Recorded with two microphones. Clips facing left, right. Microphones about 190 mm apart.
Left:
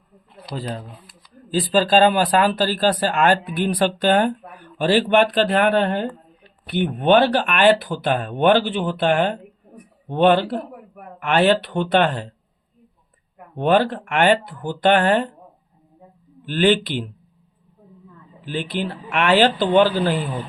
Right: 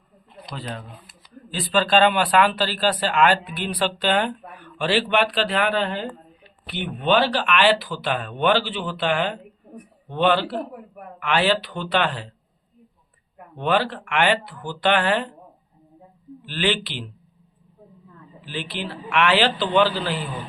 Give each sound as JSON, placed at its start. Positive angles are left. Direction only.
{"t": 0.5, "sound": "speech", "side_deg": 35}
{"t": 13.6, "sound": "speech", "side_deg": 45}
{"t": 16.5, "sound": "speech", "side_deg": 45}
{"t": 18.4, "sound": "speech", "side_deg": 50}